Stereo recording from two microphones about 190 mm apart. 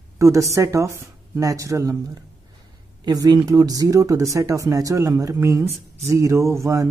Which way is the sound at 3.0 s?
20° right (ahead or behind).